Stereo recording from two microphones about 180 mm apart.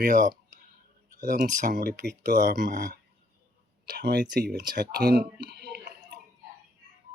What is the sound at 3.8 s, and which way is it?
Speech, 65° right (ahead or behind).